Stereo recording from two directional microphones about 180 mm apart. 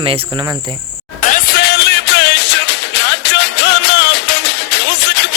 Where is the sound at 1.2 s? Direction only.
50° left (ahead or behind).